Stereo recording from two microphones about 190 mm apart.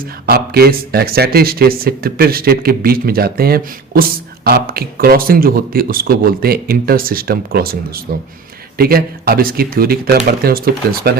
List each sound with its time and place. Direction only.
0.0 s speech: 55° right (ahead or behind)